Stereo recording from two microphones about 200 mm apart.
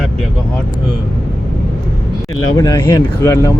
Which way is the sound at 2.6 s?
20° left (ahead or behind).